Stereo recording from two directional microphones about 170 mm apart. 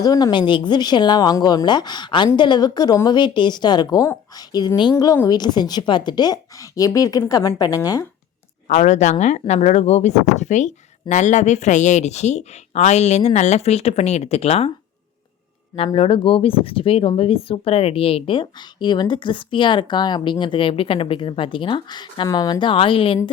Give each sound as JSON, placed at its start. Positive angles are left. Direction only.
{"t": 0.0, "sound": "speech", "side_deg": 25}
{"t": 8.6, "sound": "speech", "side_deg": 45}
{"t": 15.7, "sound": "speech", "side_deg": 30}